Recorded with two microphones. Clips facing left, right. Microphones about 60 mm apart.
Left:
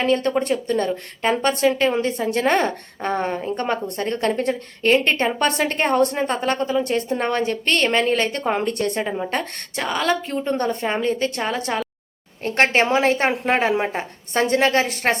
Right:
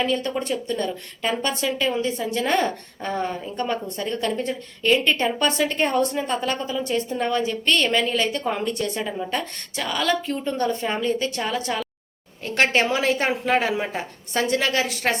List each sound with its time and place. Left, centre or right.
0.0 s a woman's voice: left